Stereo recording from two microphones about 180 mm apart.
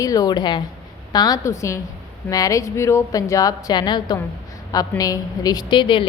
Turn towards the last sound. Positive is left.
turn(degrees=25)  # may be behind; listen again after turning